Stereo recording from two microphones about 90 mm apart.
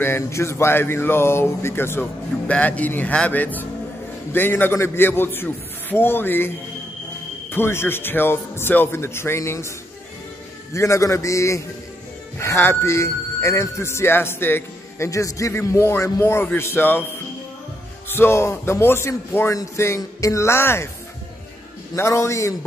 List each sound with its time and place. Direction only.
0.0 s speech: 30° left (ahead or behind)
7.5 s speech: 25° left (ahead or behind)
15.0 s speech: 35° left (ahead or behind)
18.1 s speech: 25° left (ahead or behind)
21.9 s speech: 30° left (ahead or behind)